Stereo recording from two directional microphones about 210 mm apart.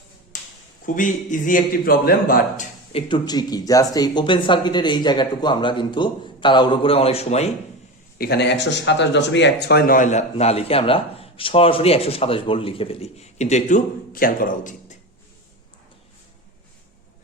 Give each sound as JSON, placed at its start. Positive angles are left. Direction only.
{"t": 0.9, "sound": "speech", "side_deg": 40}
{"t": 2.9, "sound": "speech", "side_deg": 20}
{"t": 8.2, "sound": "speech", "side_deg": 50}